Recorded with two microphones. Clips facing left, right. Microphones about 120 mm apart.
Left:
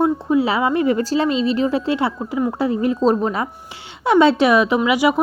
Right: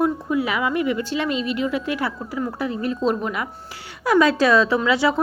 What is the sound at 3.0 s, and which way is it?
A woman's voice, 35° left (ahead or behind).